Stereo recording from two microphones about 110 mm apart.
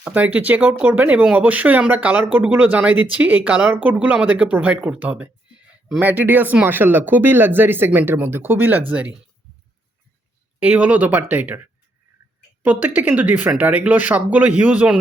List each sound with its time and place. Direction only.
0.0 s speech: 15° right (ahead or behind)
10.6 s speech: 10° right (ahead or behind)